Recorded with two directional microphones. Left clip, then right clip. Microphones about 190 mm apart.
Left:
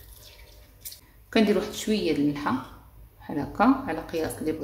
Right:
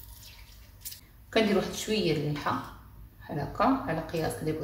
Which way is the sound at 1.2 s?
55° left (ahead or behind).